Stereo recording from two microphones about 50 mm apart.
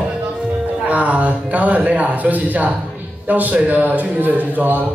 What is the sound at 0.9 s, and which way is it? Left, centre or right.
A man's voice, right.